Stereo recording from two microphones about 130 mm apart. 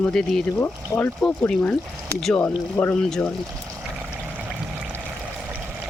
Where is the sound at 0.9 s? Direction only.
20° left (ahead or behind).